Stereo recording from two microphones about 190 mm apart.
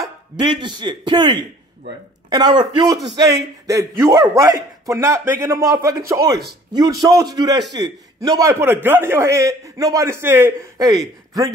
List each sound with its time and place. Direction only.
0.0 s a man's voice: 25° right (ahead or behind)